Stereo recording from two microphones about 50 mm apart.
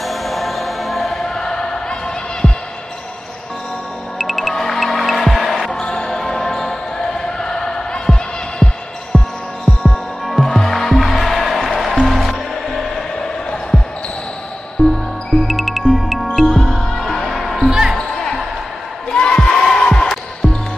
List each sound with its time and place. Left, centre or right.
0.0 s music: centre
1.2 s basketball bounce: centre
4.3 s music: centre
5.7 s basketball bounce: centre
9.1 s music: centre
14.8 s music: centre
15.4 s music: centre
17.6 s music: centre
17.9 s music: centre
19.1 s crowd: centre
19.5 s music: centre